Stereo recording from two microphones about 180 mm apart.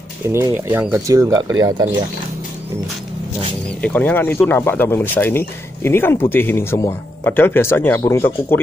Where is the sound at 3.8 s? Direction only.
10° left (ahead or behind).